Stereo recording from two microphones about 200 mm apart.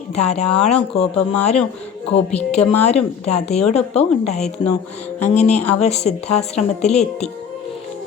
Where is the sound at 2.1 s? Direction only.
30° left (ahead or behind).